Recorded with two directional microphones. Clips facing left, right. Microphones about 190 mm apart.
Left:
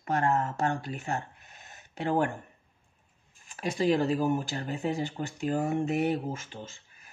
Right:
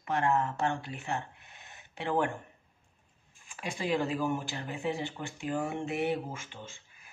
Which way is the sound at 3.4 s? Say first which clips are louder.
Left 8 dB; 40° left (ahead or behind).